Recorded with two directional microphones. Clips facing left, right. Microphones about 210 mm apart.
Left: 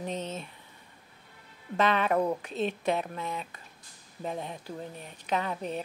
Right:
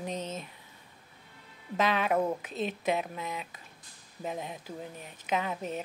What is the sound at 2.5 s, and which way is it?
Speech, 15° right (ahead or behind).